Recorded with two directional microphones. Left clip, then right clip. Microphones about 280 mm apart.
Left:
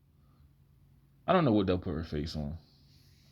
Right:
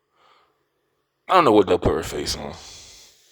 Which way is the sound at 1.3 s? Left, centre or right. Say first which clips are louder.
Right 14 dB; right.